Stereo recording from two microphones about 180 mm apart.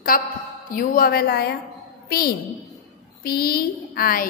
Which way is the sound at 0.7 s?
50° left (ahead or behind).